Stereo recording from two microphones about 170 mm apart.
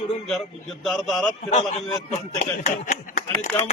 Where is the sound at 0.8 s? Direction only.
Centre (ahead or behind).